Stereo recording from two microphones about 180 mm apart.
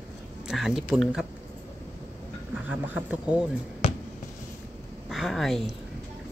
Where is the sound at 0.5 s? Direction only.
Centre (ahead or behind).